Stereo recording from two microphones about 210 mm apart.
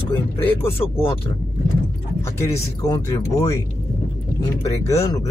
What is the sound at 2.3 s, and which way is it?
Speech, 15° left (ahead or behind).